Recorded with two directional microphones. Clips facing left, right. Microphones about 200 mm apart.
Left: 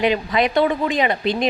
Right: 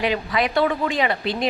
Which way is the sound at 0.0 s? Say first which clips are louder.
Left 4 dB; 20° left (ahead or behind).